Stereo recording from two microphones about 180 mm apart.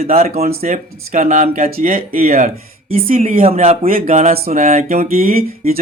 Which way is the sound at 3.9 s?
50° right (ahead or behind).